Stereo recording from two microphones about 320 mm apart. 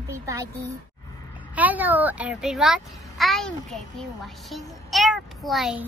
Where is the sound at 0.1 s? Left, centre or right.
Centre.